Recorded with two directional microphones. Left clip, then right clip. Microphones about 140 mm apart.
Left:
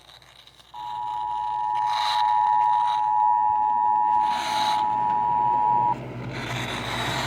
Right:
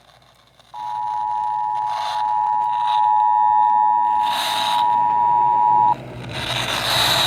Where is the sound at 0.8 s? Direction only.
30° right (ahead or behind).